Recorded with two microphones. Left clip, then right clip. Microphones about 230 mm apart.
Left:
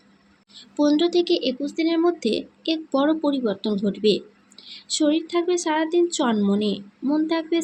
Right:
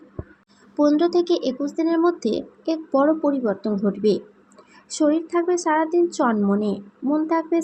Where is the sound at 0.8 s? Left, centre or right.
Centre.